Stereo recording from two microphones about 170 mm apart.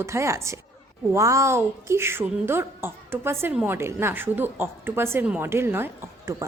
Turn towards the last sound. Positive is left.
turn(degrees=-15)  # may be behind; listen again after turning